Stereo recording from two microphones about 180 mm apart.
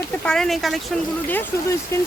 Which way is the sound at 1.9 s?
15° left (ahead or behind).